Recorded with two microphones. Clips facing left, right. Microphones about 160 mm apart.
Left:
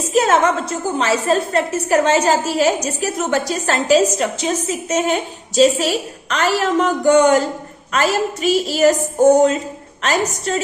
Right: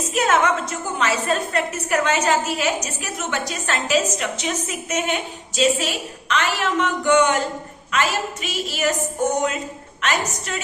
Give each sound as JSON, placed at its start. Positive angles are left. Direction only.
{"t": 0.1, "sound": "a woman's voice", "side_deg": 35}